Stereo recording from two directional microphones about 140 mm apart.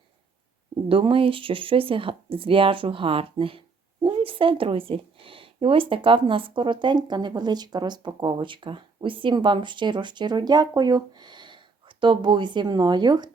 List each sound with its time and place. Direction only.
0.9 s speech: 40° right (ahead or behind)